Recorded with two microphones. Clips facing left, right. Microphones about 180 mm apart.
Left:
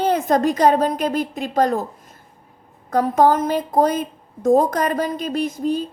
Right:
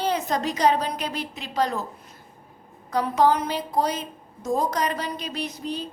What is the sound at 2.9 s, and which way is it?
A woman's voice, 50° left (ahead or behind).